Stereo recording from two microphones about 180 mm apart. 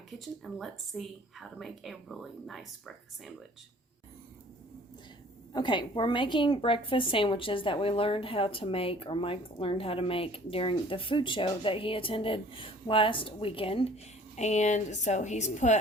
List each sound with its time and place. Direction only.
0.4 s speech: centre (ahead or behind)
5.5 s a woman's voice: 25° left (ahead or behind); by 15.8 s 40° left (ahead or behind)